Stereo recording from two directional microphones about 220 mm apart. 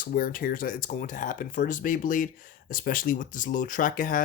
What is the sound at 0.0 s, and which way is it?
Speech, 40° left (ahead or behind).